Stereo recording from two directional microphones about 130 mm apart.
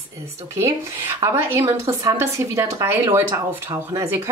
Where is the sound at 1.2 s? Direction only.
20° right (ahead or behind).